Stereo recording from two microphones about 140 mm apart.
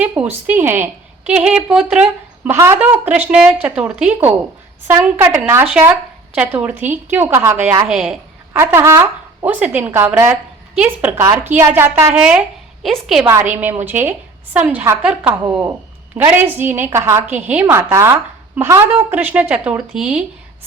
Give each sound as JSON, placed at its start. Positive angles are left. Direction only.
{"t": 0.2, "sound": "a woman's voice", "side_deg": -10}
{"t": 7.9, "sound": "a woman's voice", "side_deg": -5}
{"t": 8.5, "sound": "a woman's voice", "side_deg": -15}
{"t": 12.8, "sound": "a woman's voice", "side_deg": 0}
{"t": 13.2, "sound": "a woman's voice", "side_deg": -15}